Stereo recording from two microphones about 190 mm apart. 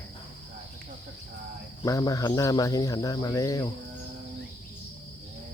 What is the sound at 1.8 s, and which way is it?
Speech, 20° left (ahead or behind).